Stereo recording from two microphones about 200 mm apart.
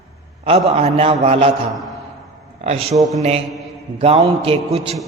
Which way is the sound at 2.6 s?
30° right (ahead or behind).